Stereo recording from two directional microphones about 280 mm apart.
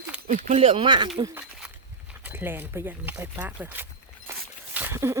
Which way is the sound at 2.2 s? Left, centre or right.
Centre.